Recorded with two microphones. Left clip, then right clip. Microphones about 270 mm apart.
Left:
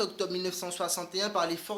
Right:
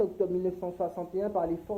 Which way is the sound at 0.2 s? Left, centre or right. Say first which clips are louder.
Right 3 dB; left.